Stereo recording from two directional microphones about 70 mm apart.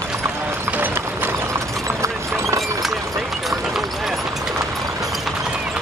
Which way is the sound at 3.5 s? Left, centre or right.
Centre.